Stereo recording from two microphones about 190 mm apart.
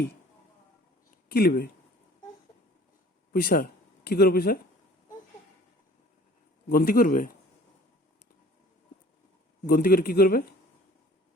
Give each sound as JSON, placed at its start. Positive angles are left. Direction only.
{"t": 1.3, "sound": "speech", "side_deg": 55}
{"t": 3.3, "sound": "speech", "side_deg": 50}
{"t": 6.7, "sound": "speech", "side_deg": 50}
{"t": 9.6, "sound": "speech", "side_deg": 50}